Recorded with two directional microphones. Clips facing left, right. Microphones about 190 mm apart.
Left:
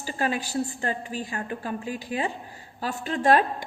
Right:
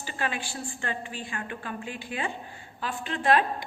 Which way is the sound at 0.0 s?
40° left (ahead or behind).